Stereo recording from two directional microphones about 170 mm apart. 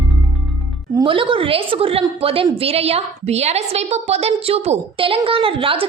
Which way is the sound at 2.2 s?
35° right (ahead or behind).